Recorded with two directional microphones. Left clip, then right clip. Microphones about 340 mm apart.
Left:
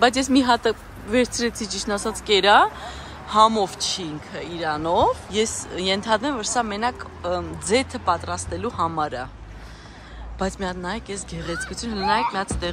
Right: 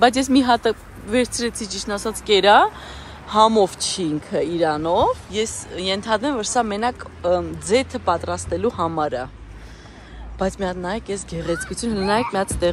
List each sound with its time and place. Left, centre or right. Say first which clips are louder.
0.0 s speech: right 2 dB; centre
10.4 s speech: right 3 dB; centre